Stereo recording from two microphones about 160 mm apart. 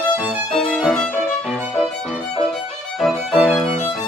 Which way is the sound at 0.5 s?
Centre (ahead or behind).